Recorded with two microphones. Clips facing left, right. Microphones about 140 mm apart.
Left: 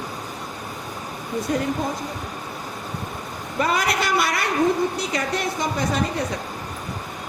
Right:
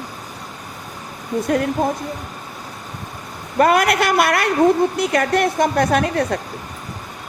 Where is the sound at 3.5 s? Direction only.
60° right (ahead or behind).